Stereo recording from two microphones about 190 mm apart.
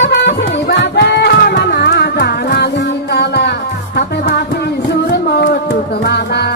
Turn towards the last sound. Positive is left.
turn(degrees=60)  # may be behind; listen again after turning